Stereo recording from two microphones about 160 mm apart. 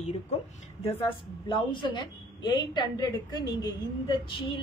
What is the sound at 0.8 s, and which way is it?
A woman's voice, 35° left (ahead or behind).